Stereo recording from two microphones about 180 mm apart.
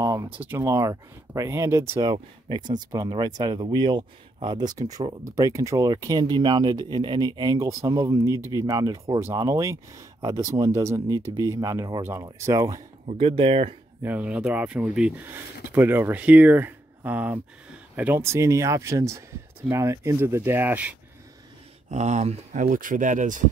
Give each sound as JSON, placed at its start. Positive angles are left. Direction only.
{"t": 0.0, "sound": "speech", "side_deg": -15}
{"t": 13.0, "sound": "speech", "side_deg": -30}
{"t": 14.0, "sound": "speech", "side_deg": -10}
{"t": 21.9, "sound": "speech", "side_deg": -40}